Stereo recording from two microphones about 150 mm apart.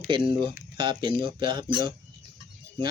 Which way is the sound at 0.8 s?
30° right (ahead or behind).